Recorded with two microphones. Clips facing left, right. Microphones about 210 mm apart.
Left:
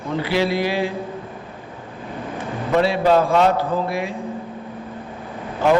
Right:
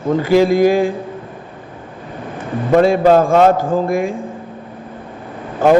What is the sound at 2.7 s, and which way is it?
A man's voice, 50° right (ahead or behind).